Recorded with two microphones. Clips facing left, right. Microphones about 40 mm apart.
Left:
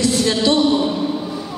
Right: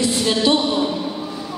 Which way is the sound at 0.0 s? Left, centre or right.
Centre.